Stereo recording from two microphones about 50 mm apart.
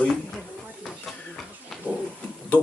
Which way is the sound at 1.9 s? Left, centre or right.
Right.